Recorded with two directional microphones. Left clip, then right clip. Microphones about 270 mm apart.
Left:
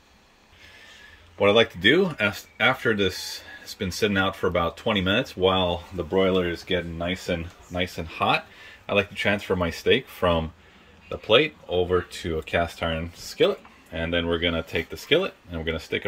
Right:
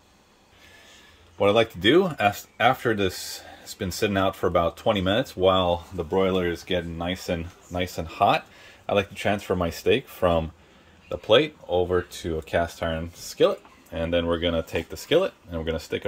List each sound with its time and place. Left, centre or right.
1.4 s speech: centre